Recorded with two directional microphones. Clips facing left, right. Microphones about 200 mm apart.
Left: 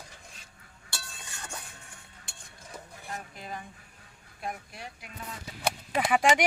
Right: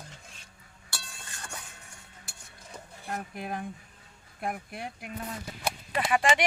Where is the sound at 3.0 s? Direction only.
55° right (ahead or behind).